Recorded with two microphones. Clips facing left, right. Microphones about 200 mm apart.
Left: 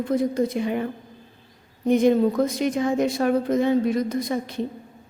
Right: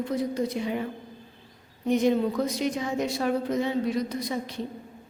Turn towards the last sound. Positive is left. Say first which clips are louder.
# left 5 dB
turn(degrees=50)  # may be behind; listen again after turning